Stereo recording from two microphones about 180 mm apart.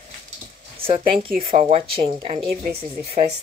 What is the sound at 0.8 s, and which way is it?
A woman's voice, 30° right (ahead or behind).